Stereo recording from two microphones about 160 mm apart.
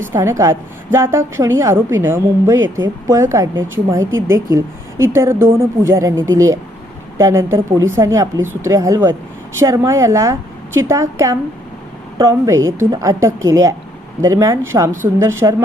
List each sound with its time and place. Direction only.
0.0 s a woman's voice: 15° right (ahead or behind)